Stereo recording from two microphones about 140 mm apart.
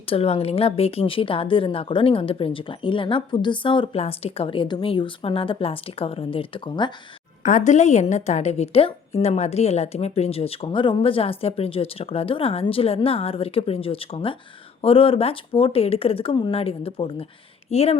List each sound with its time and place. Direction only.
0.1 s a woman's voice: 45° left (ahead or behind)
7.4 s a woman's voice: 60° left (ahead or behind)